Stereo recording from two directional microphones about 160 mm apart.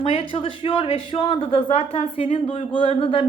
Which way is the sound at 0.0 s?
35° left (ahead or behind).